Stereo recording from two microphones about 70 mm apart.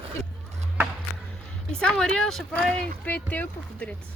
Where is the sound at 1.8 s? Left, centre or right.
Centre.